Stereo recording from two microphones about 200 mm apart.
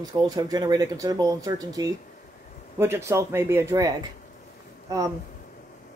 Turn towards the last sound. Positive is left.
turn(degrees=-15)  # may be behind; listen again after turning